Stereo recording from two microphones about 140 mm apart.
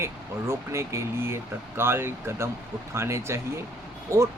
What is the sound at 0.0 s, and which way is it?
Speech, 20° right (ahead or behind).